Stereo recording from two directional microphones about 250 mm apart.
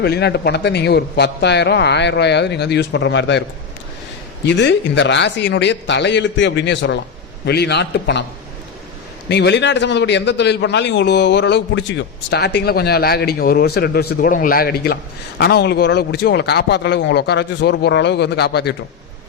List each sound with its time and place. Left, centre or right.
0.0 s a man's voice: left
4.4 s a man's voice: left
9.3 s a man's voice: left